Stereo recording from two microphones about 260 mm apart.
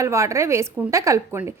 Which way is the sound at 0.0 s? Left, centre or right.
Centre.